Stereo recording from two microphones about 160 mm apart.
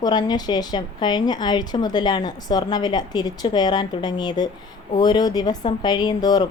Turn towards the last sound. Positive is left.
turn(degrees=25)  # may be behind; listen again after turning